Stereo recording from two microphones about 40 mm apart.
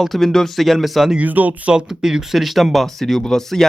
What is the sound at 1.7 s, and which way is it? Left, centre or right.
Speech, centre.